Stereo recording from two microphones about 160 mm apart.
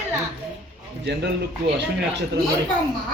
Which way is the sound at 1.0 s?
90° right.